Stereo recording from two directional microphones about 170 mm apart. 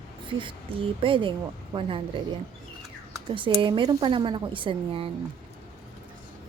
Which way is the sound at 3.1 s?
25° right (ahead or behind).